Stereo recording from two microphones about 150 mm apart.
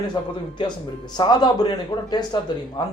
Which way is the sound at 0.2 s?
30° left (ahead or behind).